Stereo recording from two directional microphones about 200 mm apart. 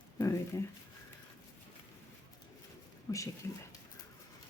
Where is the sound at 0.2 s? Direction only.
15° left (ahead or behind).